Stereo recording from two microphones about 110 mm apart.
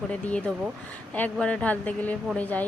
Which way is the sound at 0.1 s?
10° left (ahead or behind).